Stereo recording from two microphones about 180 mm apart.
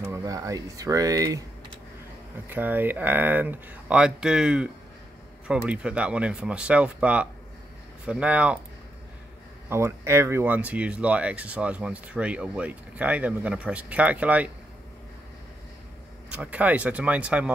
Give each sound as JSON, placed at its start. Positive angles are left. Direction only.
{"t": 0.1, "sound": "speech", "side_deg": -20}
{"t": 2.5, "sound": "speech", "side_deg": -10}
{"t": 9.7, "sound": "speech", "side_deg": -15}
{"t": 16.3, "sound": "speech", "side_deg": -10}